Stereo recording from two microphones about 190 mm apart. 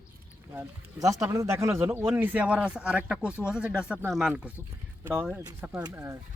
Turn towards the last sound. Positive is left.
turn(degrees=-15)  # may be behind; listen again after turning